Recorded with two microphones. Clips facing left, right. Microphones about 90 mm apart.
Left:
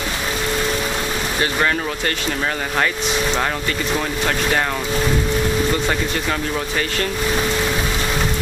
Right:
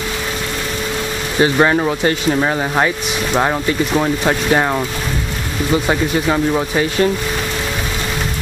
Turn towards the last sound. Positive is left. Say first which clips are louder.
# right 6 dB
turn(degrees=-15)  # may be behind; listen again after turning